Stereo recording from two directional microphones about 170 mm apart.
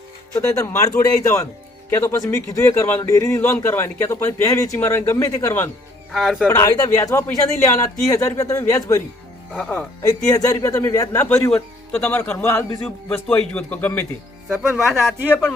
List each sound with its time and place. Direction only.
0.3 s a man's voice: 15° left (ahead or behind)
6.1 s speech: centre (ahead or behind)
6.5 s speech: 20° left (ahead or behind)
9.5 s a man's voice: 5° left (ahead or behind)
10.1 s a man's voice: 20° left (ahead or behind)
14.4 s speech: 5° right (ahead or behind)
15.3 s a man's voice: 10° left (ahead or behind)